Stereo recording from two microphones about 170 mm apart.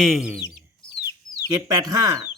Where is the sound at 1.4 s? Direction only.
20° right (ahead or behind).